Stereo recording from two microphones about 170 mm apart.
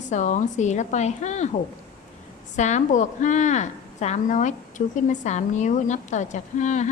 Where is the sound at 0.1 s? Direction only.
45° left (ahead or behind).